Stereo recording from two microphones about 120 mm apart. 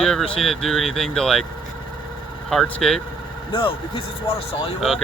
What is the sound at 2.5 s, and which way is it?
Speech, 5° left (ahead or behind).